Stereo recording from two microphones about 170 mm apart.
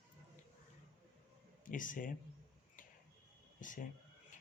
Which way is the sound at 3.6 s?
50° left (ahead or behind).